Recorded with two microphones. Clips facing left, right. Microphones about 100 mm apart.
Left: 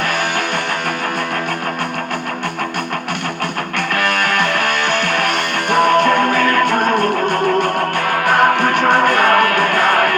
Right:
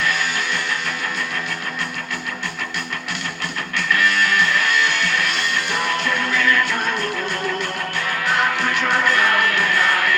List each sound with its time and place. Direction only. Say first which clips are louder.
0.0 s music: left 4 dB; 55° left (ahead or behind)
3.8 s music: left 1 dB; 50° left (ahead or behind)